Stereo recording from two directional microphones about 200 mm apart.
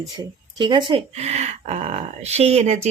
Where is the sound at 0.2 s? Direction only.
25° right (ahead or behind).